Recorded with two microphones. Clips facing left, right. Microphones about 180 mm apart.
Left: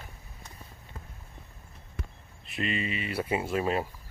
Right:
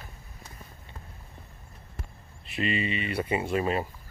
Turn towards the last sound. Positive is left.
turn(degrees=0)  # may be behind; listen again after turning